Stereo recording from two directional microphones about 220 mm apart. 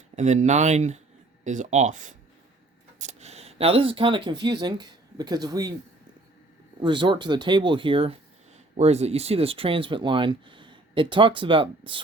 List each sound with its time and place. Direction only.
0.2 s speech: 30° right (ahead or behind)
6.8 s speech: 20° right (ahead or behind)